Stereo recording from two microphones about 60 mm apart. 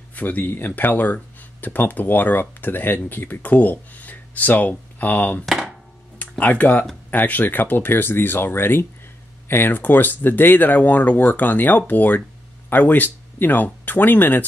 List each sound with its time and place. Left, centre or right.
0.1 s speech: left
6.4 s speech: left